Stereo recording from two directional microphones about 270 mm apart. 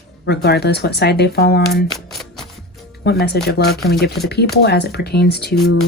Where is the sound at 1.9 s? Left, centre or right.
Centre.